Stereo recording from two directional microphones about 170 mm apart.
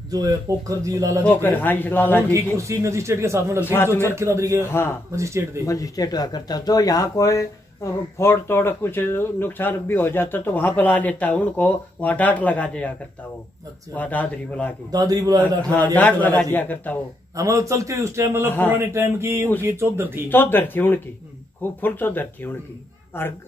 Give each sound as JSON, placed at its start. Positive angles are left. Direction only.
{"t": 0.1, "sound": "speech", "side_deg": -20}
{"t": 1.2, "sound": "speech", "side_deg": 10}
{"t": 2.3, "sound": "a man's voice", "side_deg": -15}
{"t": 3.6, "sound": "speech", "side_deg": 15}
{"t": 4.1, "sound": "a man's voice", "side_deg": -15}
{"t": 4.6, "sound": "speech", "side_deg": 15}
{"t": 5.1, "sound": "a man's voice", "side_deg": -15}
{"t": 5.7, "sound": "speech", "side_deg": 20}
{"t": 13.9, "sound": "speech", "side_deg": 10}
{"t": 14.9, "sound": "speech", "side_deg": -20}
{"t": 15.9, "sound": "speech", "side_deg": 10}
{"t": 17.4, "sound": "a man's voice", "side_deg": -20}
{"t": 20.2, "sound": "speech", "side_deg": 10}